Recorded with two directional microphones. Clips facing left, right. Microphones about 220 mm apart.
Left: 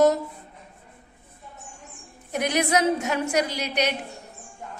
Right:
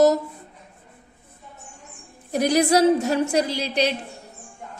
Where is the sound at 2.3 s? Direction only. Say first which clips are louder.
Right 5 dB; 35° right (ahead or behind).